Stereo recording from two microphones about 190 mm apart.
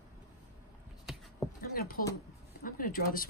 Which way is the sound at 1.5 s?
50° left (ahead or behind).